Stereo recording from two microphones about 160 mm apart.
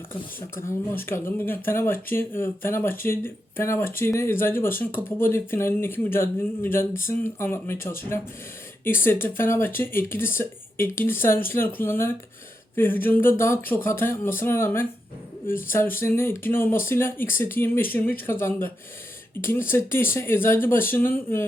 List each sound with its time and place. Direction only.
0.5 s speech: 15° left (ahead or behind)